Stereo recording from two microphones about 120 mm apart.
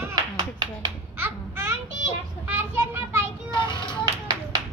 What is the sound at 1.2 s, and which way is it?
Babbling, 20° right (ahead or behind).